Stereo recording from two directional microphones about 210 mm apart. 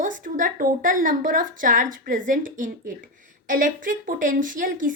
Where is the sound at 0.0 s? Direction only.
40° right (ahead or behind).